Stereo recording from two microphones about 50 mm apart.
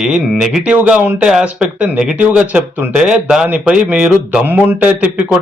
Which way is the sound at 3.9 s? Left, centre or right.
Right.